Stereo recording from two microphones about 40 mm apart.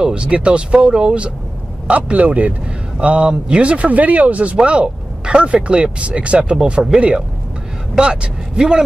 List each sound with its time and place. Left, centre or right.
0.0 s speech: right
3.0 s speech: right